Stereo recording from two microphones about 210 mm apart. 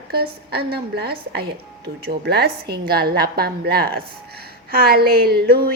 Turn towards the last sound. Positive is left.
turn(degrees=-45)  # may be behind; listen again after turning